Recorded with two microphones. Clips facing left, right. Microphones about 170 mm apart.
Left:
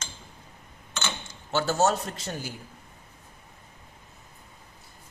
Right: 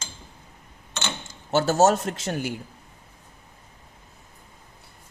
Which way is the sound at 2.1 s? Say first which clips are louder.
Right 7 dB; 75° right (ahead or behind).